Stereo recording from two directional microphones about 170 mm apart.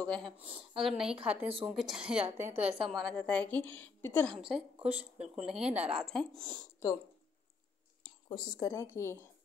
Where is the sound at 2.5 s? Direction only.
35° right (ahead or behind).